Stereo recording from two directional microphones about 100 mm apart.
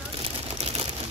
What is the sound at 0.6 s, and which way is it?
Typewriter, 90° right.